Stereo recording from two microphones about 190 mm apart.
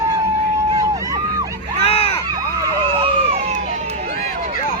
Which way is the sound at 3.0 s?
35° right (ahead or behind).